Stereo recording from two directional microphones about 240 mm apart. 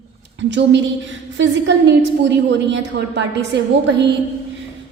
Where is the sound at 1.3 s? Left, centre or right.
Right.